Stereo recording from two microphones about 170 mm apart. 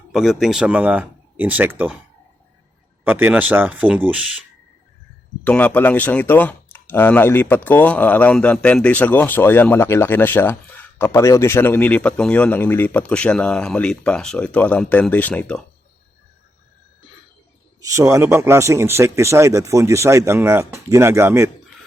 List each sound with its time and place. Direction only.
0.1 s speech: centre (ahead or behind)
3.0 s a man's voice: 10° right (ahead or behind)
5.5 s speech: 10° left (ahead or behind)
17.7 s a man's voice: 20° right (ahead or behind)